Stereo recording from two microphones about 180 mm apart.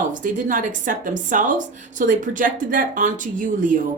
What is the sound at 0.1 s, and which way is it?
A woman's voice, 45° right (ahead or behind).